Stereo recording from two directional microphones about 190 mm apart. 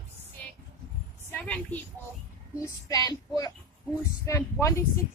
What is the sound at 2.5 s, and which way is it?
Speech, 15° left (ahead or behind).